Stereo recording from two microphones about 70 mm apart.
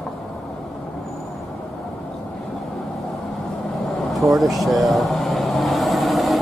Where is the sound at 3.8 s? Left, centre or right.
Centre.